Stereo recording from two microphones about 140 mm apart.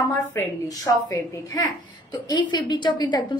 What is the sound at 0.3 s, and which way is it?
A woman's voice, 20° left (ahead or behind).